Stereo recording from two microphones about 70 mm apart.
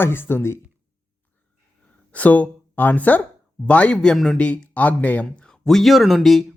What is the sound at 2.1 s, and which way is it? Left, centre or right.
Speech, left.